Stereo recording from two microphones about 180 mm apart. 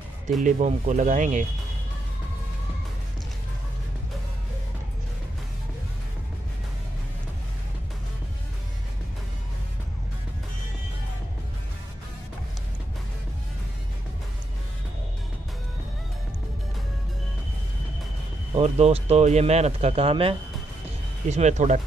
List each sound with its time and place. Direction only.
0.4 s speech: 45° right (ahead or behind)
18.5 s speech: 35° right (ahead or behind)